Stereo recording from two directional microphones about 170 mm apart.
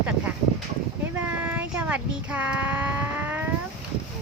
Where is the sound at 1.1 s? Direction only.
10° right (ahead or behind).